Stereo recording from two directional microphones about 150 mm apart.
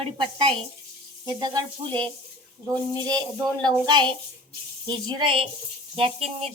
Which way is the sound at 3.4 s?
5° left (ahead or behind).